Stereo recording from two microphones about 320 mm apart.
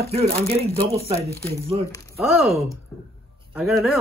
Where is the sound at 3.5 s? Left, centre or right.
Centre.